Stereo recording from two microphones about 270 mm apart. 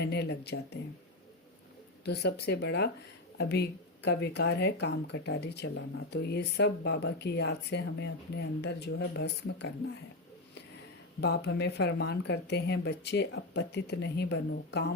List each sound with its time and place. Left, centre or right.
0.0 s speech: left
2.0 s speech: left
4.0 s speech: left
11.2 s speech: left